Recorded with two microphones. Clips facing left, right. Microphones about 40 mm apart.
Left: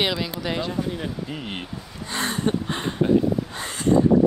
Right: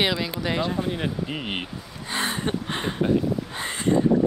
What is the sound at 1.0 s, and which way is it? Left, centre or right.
Speech, right.